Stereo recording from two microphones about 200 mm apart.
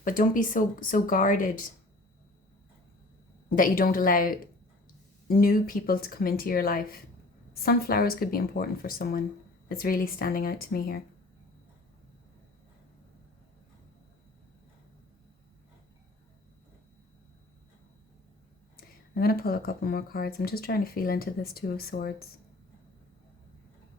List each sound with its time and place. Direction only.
0.0 s speech: 45° left (ahead or behind)
3.5 s speech: 45° left (ahead or behind)
19.1 s speech: 50° left (ahead or behind)